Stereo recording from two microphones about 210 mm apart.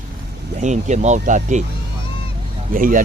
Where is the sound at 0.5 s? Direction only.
35° right (ahead or behind).